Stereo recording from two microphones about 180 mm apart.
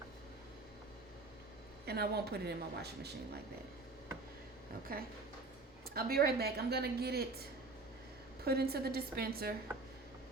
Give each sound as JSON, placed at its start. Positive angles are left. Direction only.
{"t": 1.9, "sound": "a woman's voice", "side_deg": -60}
{"t": 4.9, "sound": "a woman's voice", "side_deg": -55}
{"t": 8.4, "sound": "a woman's voice", "side_deg": -60}